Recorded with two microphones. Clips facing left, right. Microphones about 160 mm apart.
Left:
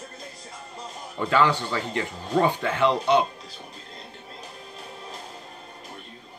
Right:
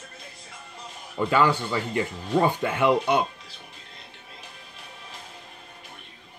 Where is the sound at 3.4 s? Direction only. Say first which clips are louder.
Left 5 dB; 40° left (ahead or behind).